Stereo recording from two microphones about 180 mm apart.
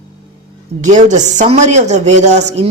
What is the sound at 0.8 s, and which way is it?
A man's voice, 40° right (ahead or behind).